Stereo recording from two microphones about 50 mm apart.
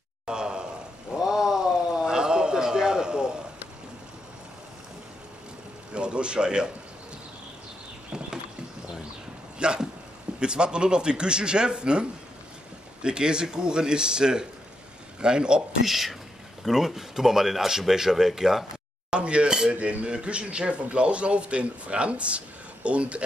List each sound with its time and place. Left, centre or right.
0.3 s a sound: centre
5.9 s a man's voice: right
9.6 s a sound: centre
10.4 s a man's voice: centre
15.9 s speech: centre
19.0 s speech: right